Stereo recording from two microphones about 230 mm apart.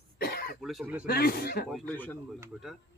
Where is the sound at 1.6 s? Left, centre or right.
Centre.